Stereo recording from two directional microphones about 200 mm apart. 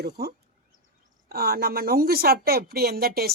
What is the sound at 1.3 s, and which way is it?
A woman's voice, 50° right (ahead or behind).